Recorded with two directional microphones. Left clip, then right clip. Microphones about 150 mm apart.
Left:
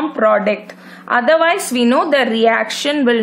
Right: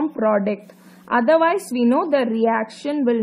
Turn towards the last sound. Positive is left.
turn(degrees=40)  # may be behind; listen again after turning